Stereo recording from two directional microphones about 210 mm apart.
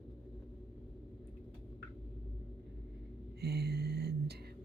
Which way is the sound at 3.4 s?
50° right (ahead or behind).